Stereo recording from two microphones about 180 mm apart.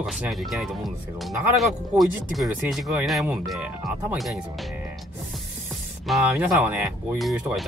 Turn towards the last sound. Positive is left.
turn(degrees=0)  # may be behind; listen again after turning